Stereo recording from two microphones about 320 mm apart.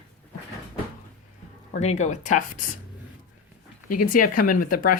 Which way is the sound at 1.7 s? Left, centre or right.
Left.